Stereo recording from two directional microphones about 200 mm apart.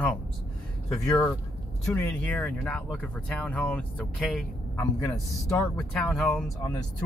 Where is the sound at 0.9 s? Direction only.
15° left (ahead or behind).